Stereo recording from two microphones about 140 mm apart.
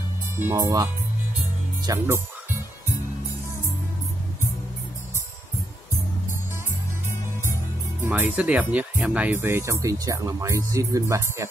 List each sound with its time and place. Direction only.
0.4 s speech: 20° right (ahead or behind)
1.9 s speech: 20° right (ahead or behind)
8.1 s speech: 10° right (ahead or behind)